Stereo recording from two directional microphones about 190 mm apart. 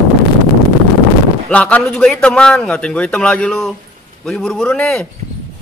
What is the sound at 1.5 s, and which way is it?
A man's voice, 5° left (ahead or behind).